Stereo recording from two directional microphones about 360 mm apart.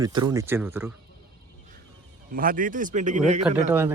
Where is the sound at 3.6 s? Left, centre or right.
Centre.